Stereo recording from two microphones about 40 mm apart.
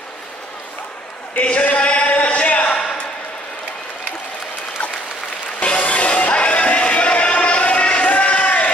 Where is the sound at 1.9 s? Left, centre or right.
Left.